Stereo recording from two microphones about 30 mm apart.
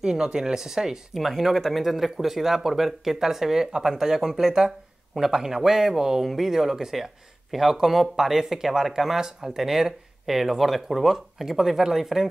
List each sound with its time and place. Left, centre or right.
0.0 s speech: right
1.2 s speech: centre